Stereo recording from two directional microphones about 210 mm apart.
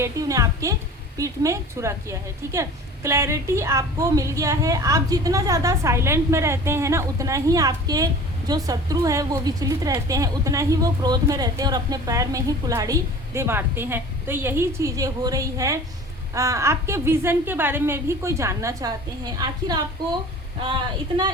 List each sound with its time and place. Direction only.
0.0 s a woman's voice: 15° right (ahead or behind)